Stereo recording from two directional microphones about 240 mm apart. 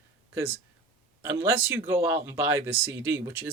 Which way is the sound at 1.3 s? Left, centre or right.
Centre.